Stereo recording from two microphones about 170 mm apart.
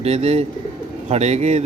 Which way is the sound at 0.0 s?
35° right (ahead or behind).